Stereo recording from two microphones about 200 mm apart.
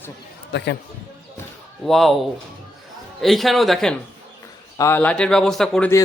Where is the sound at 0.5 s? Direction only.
60° left (ahead or behind).